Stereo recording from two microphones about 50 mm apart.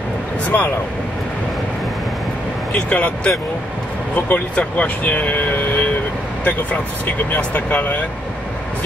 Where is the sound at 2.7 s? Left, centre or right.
Left.